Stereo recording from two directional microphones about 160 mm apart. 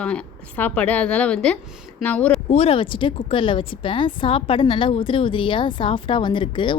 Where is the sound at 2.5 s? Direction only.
40° left (ahead or behind).